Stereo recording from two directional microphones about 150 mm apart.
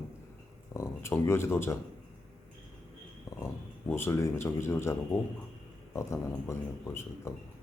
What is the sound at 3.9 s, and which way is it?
Speech, 15° left (ahead or behind).